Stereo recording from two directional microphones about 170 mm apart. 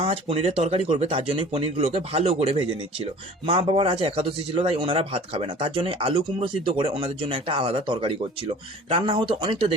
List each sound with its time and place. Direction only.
0.0 s speech: 35° right (ahead or behind)